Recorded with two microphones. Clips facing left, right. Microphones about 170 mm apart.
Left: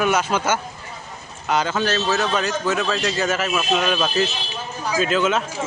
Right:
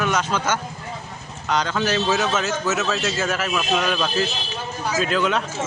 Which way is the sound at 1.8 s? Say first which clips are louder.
Even; 10° right (ahead or behind).